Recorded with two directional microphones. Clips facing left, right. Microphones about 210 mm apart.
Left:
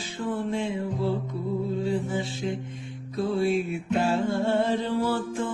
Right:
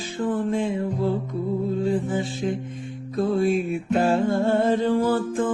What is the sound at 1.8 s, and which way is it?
Music, 50° right (ahead or behind).